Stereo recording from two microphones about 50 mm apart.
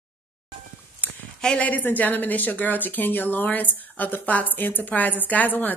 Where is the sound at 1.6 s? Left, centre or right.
Left.